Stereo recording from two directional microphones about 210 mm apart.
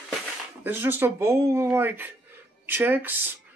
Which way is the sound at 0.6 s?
10° right (ahead or behind).